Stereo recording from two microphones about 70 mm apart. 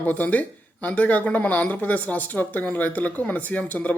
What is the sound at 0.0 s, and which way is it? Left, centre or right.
Speech, left.